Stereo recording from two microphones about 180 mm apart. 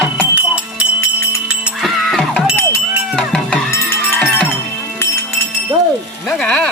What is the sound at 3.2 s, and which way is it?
Music, 5° left (ahead or behind).